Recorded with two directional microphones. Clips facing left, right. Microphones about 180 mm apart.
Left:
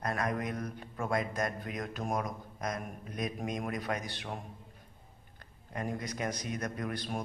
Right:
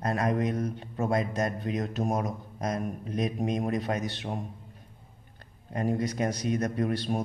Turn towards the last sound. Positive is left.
turn(degrees=-25)  # may be behind; listen again after turning